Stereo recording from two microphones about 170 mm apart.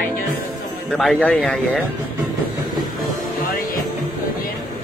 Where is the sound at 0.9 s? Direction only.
5° left (ahead or behind).